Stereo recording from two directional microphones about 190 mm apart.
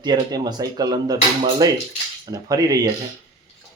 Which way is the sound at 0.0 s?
20° right (ahead or behind).